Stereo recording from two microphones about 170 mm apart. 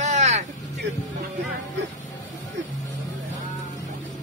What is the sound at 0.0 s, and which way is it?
Vehicle, 45° right (ahead or behind).